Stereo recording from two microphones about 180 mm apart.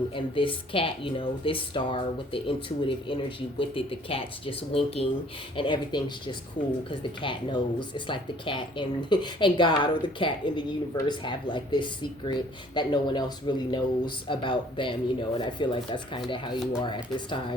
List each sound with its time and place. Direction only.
0.3 s speech: 30° left (ahead or behind)